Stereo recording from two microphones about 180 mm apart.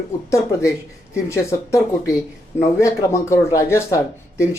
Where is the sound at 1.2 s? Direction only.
15° left (ahead or behind).